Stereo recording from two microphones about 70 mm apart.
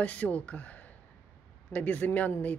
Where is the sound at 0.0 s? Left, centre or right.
Left.